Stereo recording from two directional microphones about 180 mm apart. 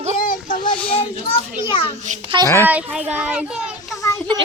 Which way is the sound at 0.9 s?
35° left (ahead or behind).